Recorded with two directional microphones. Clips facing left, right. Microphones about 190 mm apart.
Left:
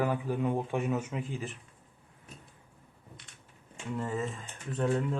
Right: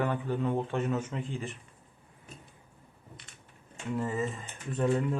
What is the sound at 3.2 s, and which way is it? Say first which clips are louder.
Crushing: right 1 dB; centre (ahead or behind).